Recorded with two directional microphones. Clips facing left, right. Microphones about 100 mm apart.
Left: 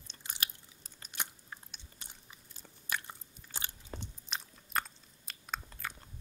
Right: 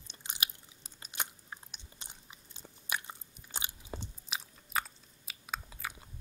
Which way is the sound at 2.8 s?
15° right (ahead or behind).